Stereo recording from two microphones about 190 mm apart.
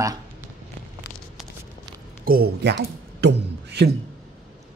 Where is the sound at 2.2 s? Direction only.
55° right (ahead or behind).